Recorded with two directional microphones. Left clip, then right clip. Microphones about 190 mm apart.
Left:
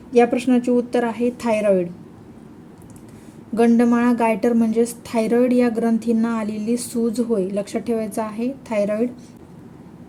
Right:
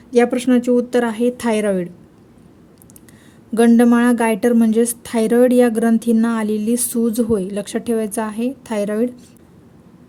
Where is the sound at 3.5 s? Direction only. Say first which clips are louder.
Right 4 dB; 45° right (ahead or behind).